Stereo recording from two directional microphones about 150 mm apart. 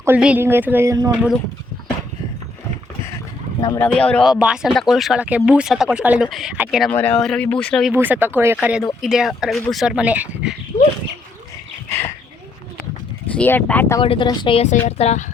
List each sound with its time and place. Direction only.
0.2 s a sound: 10° right (ahead or behind)
3.8 s speech: 10° left (ahead or behind)
6.9 s speech: 10° left (ahead or behind)
7.9 s a sound: 15° right (ahead or behind)
9.0 s speech: centre (ahead or behind)
11.9 s dog: 15° left (ahead or behind)
13.3 s speech: 10° left (ahead or behind)
14.0 s speech: 35° left (ahead or behind)
14.8 s speech: 45° left (ahead or behind)